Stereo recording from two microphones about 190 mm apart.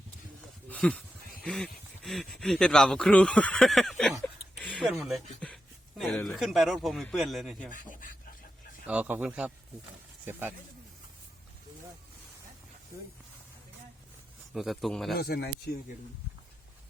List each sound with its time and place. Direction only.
0.7 s speech: 5° left (ahead or behind)
4.6 s a sound: centre (ahead or behind)
6.0 s speech: centre (ahead or behind)
7.9 s speech: 45° left (ahead or behind)
8.9 s a man's voice: 10° right (ahead or behind)
14.5 s speech: centre (ahead or behind)
15.1 s speech: 55° left (ahead or behind)